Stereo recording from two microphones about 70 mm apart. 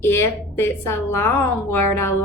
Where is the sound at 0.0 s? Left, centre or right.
Left.